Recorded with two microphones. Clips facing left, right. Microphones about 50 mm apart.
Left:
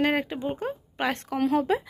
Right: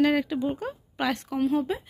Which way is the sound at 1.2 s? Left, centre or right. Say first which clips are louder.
Left 4 dB; left.